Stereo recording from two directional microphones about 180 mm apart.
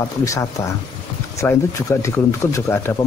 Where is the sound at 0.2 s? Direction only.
20° left (ahead or behind).